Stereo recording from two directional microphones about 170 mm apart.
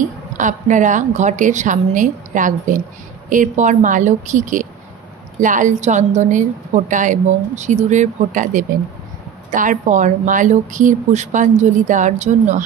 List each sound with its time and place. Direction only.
0.4 s a woman's voice: 50° right (ahead or behind)